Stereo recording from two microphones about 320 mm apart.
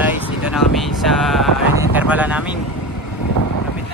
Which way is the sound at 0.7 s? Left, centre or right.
Centre.